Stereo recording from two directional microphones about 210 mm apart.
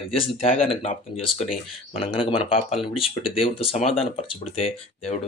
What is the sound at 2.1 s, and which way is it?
Speech, 25° left (ahead or behind).